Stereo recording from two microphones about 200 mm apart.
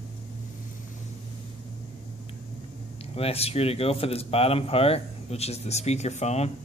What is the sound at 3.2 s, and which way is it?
Speech, 30° left (ahead or behind).